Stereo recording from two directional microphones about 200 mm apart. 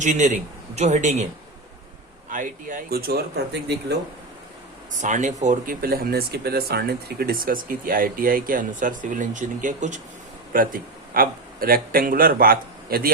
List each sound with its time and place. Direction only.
0.0 s speech: 35° right (ahead or behind)
2.3 s speech: 40° right (ahead or behind)
5.0 s a man's voice: 35° right (ahead or behind)